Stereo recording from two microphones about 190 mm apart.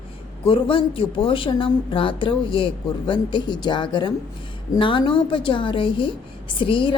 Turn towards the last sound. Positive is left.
turn(degrees=25)  # may be behind; listen again after turning